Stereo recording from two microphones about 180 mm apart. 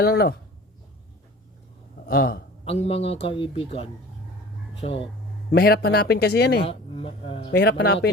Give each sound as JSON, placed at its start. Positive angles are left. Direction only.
{"t": 0.0, "sound": "speech", "side_deg": 60}
{"t": 2.0, "sound": "speech", "side_deg": 55}
{"t": 2.6, "sound": "a man's voice", "side_deg": 35}
{"t": 5.5, "sound": "speech", "side_deg": 60}
{"t": 6.7, "sound": "a man's voice", "side_deg": 30}
{"t": 7.5, "sound": "speech", "side_deg": 65}